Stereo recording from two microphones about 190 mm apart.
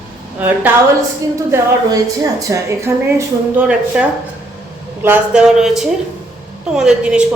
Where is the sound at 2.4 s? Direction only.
15° right (ahead or behind).